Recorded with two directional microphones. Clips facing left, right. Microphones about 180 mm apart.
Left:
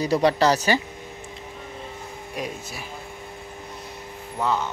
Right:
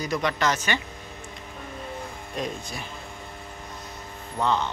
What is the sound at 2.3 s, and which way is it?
Speech, 10° left (ahead or behind).